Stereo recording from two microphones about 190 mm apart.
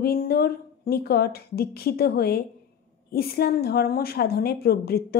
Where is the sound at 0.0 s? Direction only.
55° left (ahead or behind).